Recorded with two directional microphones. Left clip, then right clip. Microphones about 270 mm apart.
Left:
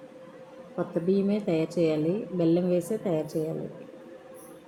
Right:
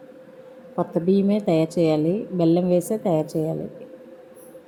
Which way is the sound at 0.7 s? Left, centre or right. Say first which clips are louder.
Right 5 dB; centre.